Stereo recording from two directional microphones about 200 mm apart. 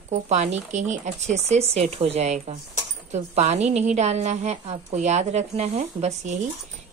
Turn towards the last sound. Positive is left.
turn(degrees=-35)  # may be behind; listen again after turning